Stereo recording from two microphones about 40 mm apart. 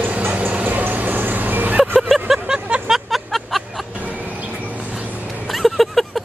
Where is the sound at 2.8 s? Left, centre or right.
Centre.